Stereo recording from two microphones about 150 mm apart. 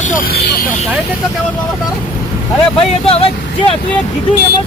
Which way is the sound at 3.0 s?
40° left (ahead or behind).